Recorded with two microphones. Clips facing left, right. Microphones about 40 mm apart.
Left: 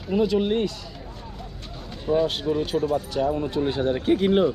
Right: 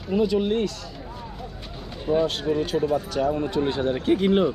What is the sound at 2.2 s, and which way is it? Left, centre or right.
Speech, centre.